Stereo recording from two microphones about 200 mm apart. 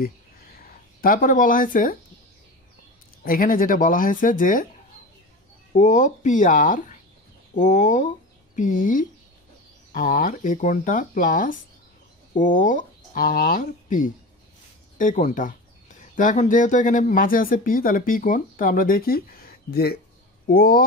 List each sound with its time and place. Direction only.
0.0 s a sound: 45° left (ahead or behind)
3.3 s speech: 45° left (ahead or behind)
5.8 s speech: 40° left (ahead or behind)